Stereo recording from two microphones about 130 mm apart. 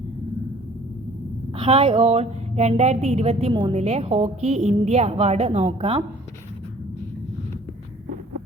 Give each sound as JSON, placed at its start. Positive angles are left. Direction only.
{"t": 1.5, "sound": "a woman's voice", "side_deg": -45}
{"t": 3.5, "sound": "a woman's voice", "side_deg": -40}
{"t": 3.8, "sound": "a woman's voice", "side_deg": -55}